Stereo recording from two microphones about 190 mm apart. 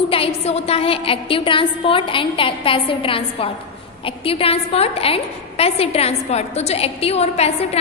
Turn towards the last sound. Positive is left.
turn(degrees=35)  # may be behind; listen again after turning